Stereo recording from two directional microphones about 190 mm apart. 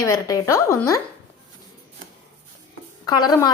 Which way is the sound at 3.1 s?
20° left (ahead or behind).